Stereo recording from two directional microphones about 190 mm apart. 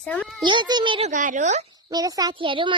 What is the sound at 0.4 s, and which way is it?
A child's voice, 25° right (ahead or behind).